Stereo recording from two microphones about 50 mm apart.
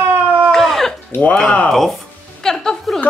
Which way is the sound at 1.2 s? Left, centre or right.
Left.